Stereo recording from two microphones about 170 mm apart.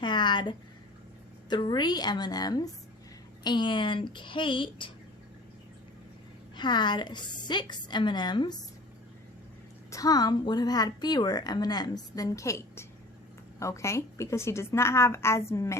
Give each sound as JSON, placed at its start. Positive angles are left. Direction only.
{"t": 0.0, "sound": "a sound", "side_deg": 25}
{"t": 1.5, "sound": "a woman's voice", "side_deg": 25}
{"t": 6.6, "sound": "a woman's voice", "side_deg": 25}
{"t": 9.9, "sound": "a woman's voice", "side_deg": 20}